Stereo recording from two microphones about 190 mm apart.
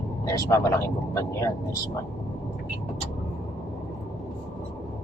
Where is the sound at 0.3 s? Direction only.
15° left (ahead or behind).